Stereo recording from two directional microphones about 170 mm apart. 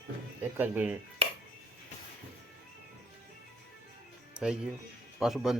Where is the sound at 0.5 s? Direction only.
10° right (ahead or behind).